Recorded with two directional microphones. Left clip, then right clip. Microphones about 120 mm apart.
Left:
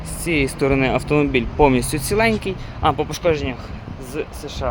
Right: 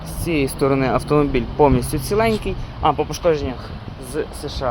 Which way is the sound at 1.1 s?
25° left (ahead or behind).